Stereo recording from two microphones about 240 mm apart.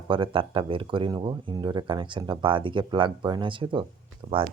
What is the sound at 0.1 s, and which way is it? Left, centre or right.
Speech, right.